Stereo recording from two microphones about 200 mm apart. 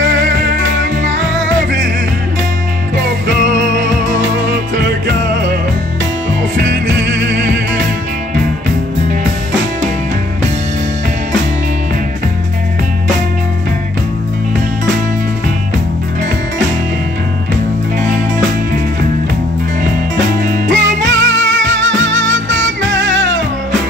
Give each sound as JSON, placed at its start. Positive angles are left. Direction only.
{"t": 7.3, "sound": "music", "side_deg": -60}
{"t": 20.4, "sound": "music", "side_deg": -40}
{"t": 21.0, "sound": "music", "side_deg": -65}